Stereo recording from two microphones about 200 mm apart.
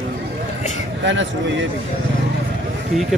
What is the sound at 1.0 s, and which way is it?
Speech, 65° right (ahead or behind).